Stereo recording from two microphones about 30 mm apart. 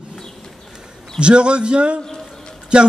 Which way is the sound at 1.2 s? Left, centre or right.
Right.